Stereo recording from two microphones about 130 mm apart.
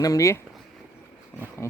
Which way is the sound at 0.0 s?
25° left (ahead or behind).